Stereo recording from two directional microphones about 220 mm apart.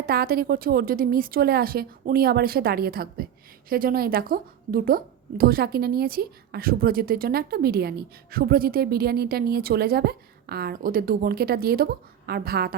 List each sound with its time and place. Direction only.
0.0 s a woman's voice: 45° right (ahead or behind)